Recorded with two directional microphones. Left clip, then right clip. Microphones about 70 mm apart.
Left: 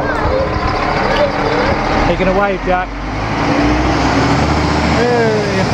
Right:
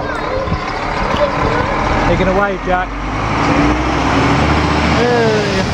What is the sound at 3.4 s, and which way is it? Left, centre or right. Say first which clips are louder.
Vehicle: right 1 dB; left.